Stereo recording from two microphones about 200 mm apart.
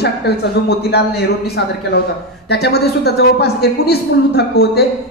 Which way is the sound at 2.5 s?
55° left (ahead or behind).